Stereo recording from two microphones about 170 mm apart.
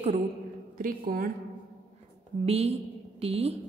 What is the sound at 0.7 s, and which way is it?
Speech, 55° right (ahead or behind).